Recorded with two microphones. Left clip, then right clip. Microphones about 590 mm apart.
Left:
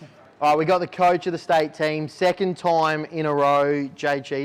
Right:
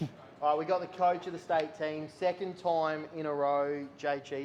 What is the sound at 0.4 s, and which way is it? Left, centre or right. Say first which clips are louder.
A man's voice: left 11 dB; left.